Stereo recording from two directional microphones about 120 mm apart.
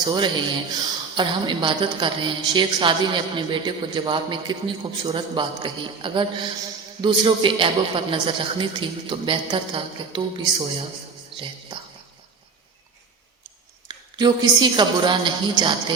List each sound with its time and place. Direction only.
0.0 s a woman's voice: 40° right (ahead or behind)
11.7 s speech: 40° right (ahead or behind)
13.8 s a woman's voice: 35° right (ahead or behind)